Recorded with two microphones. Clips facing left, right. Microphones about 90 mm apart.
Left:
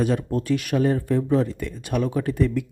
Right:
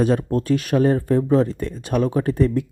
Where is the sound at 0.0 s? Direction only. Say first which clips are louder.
Right 4 dB; 40° right (ahead or behind).